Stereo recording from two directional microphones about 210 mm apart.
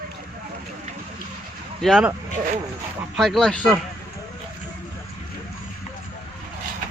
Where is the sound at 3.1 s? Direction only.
Centre (ahead or behind).